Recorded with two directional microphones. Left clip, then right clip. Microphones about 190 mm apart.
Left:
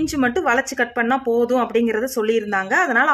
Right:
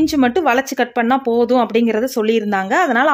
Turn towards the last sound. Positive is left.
turn(degrees=-45)  # may be behind; listen again after turning